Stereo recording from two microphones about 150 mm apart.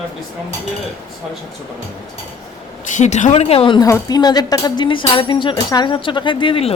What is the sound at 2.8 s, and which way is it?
Speech, 55° left (ahead or behind).